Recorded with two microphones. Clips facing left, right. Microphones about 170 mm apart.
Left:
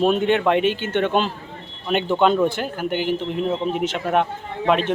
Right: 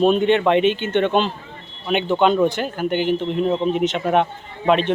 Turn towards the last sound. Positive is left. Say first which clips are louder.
# right 2 dB
turn(degrees=5)  # may be behind; listen again after turning